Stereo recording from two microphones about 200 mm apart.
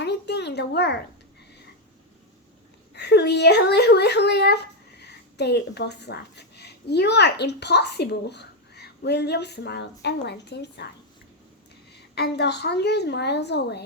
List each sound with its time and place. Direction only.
0.0 s a sound: 55° left (ahead or behind)
2.9 s speech: 55° left (ahead or behind)
12.1 s a woman's voice: 55° left (ahead or behind)